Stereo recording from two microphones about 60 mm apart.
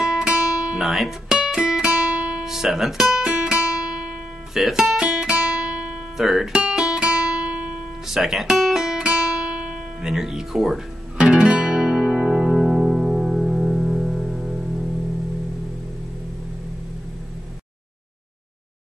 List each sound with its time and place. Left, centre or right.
0.0 s guitar: centre
0.7 s music: centre
2.4 s guitar: centre
4.6 s guitar: centre
6.1 s speech: centre
6.5 s guitar: centre
8.1 s guitar: centre
11.1 s music: centre